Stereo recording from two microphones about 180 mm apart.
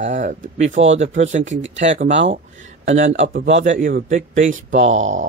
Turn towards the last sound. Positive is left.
turn(degrees=-40)  # may be behind; listen again after turning